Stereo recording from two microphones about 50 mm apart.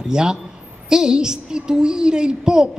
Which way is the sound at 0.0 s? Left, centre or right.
Centre.